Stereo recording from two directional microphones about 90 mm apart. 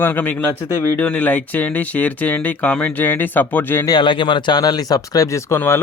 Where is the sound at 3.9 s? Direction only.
60° left (ahead or behind); by 5.7 s 30° left (ahead or behind).